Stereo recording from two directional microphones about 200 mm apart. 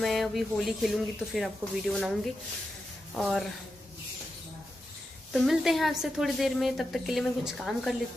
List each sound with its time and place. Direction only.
0.0 s a woman's voice: centre (ahead or behind)
3.2 s a woman's voice: centre (ahead or behind)
5.3 s a woman's voice: centre (ahead or behind)